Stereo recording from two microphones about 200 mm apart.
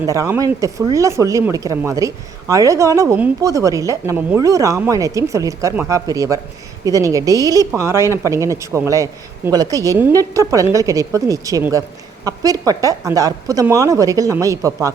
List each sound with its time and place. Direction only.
0.0 s speech: 15° right (ahead or behind)